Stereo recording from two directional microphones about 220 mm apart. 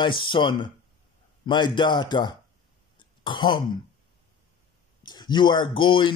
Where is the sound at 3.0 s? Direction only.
20° left (ahead or behind).